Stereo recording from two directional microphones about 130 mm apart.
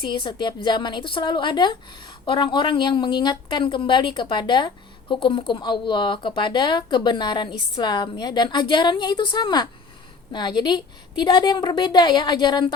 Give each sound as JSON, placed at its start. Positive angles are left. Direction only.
{"t": 0.0, "sound": "a woman's voice", "side_deg": 35}